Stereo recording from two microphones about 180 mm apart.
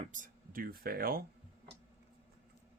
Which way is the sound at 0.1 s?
50° right (ahead or behind).